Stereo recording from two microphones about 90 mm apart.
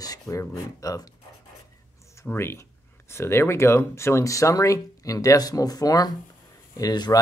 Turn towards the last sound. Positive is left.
turn(degrees=50)  # may be behind; listen again after turning